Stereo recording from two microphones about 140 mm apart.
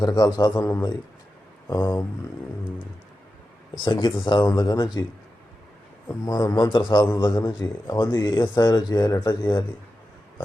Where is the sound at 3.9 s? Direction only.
35° left (ahead or behind).